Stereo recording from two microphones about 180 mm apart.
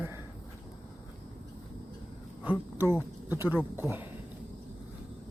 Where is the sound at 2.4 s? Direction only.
10° right (ahead or behind).